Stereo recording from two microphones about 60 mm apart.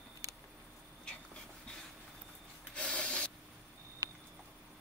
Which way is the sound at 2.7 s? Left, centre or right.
Centre.